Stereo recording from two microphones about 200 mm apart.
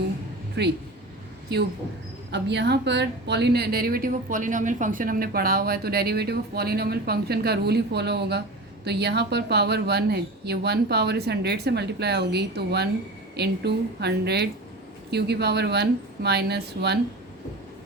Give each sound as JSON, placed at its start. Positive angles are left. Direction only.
{"t": 2.3, "sound": "a woman's voice", "side_deg": -55}